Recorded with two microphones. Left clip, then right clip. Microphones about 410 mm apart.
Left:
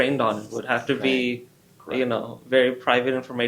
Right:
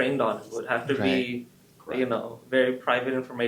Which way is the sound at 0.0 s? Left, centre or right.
Left.